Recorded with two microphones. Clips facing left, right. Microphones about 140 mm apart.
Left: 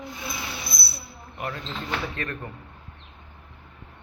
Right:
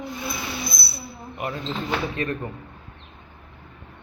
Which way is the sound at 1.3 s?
20° right (ahead or behind).